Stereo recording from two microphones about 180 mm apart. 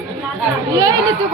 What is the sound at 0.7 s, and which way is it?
Chatter, 20° right (ahead or behind).